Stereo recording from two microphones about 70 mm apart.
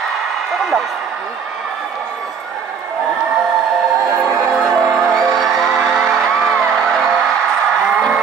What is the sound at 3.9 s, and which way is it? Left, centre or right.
Music, right.